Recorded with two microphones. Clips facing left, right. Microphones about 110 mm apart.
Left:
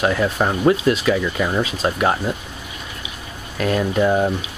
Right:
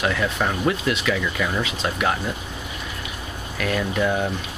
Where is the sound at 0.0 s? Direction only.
30° left (ahead or behind).